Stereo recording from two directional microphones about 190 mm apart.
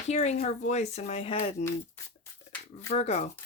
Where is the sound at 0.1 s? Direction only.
35° left (ahead or behind).